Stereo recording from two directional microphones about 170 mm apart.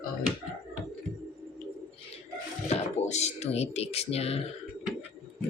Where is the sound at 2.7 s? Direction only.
40° left (ahead or behind).